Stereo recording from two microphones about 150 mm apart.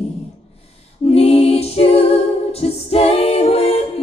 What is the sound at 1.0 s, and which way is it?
Music, 40° left (ahead or behind).